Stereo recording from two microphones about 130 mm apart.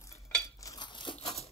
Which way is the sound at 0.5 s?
30° left (ahead or behind).